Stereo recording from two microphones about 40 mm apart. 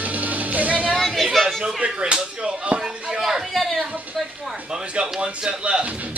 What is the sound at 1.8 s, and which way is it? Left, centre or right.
Slap, right.